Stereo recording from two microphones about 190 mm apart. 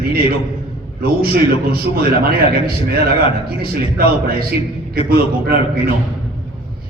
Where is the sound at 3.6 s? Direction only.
50° right (ahead or behind).